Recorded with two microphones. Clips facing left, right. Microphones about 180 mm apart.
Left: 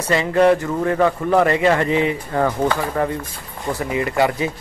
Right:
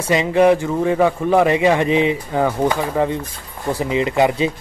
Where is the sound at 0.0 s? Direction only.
15° right (ahead or behind).